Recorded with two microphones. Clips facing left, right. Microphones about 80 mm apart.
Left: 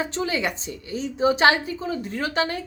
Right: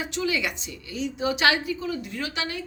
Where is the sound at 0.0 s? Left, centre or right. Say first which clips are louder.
Left 2 dB; left.